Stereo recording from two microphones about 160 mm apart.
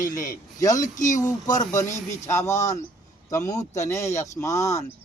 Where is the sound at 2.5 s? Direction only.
20° left (ahead or behind).